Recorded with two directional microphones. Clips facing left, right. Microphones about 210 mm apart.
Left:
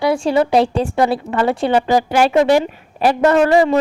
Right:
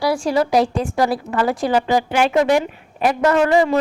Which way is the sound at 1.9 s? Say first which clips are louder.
Left 3 dB; 40° left (ahead or behind).